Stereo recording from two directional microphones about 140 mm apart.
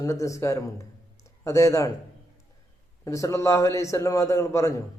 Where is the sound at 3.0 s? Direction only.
25° left (ahead or behind).